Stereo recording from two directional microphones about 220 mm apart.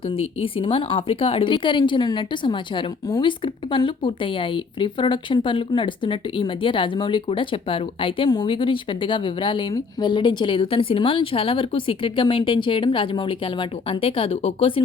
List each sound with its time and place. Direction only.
0.4 s a woman's voice: 25° left (ahead or behind)